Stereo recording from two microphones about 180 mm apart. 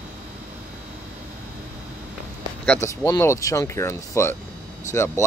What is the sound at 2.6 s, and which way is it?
Speech, 5° left (ahead or behind).